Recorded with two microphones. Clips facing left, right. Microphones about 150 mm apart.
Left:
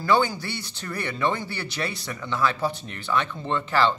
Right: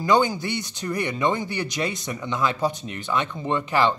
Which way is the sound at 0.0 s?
15° right (ahead or behind).